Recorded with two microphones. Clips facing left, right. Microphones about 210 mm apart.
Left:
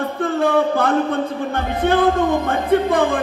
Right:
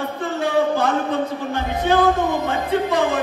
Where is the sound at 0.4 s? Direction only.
55° left (ahead or behind).